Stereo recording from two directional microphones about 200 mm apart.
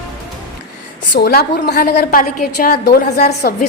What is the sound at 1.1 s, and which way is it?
A woman's voice, 50° left (ahead or behind).